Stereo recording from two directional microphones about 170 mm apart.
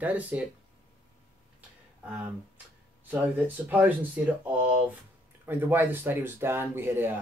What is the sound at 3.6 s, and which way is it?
Speech, 10° right (ahead or behind).